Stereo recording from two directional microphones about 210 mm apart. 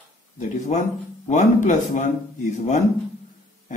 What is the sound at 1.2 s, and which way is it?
Speech, 35° left (ahead or behind).